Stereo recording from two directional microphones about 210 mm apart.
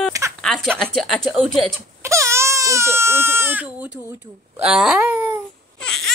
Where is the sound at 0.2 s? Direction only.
15° right (ahead or behind).